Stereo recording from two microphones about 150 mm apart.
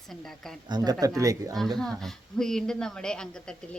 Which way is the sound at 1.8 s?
Centre (ahead or behind).